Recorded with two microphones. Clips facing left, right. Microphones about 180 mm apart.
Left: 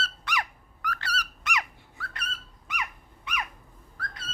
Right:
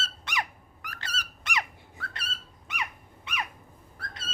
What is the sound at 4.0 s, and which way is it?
Owl, 25° right (ahead or behind).